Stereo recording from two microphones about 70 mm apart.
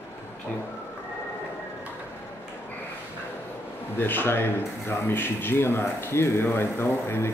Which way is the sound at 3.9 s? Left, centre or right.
Left.